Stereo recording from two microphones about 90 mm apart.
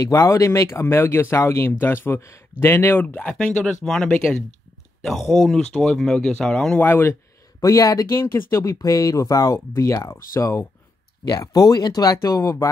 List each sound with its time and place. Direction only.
0.0 s speech: 35° left (ahead or behind); by 6.9 s 10° left (ahead or behind)
6.9 s speech: 25° left (ahead or behind)
7.6 s speech: 40° left (ahead or behind)
8.2 s speech: 30° left (ahead or behind)
11.2 s speech: 40° left (ahead or behind)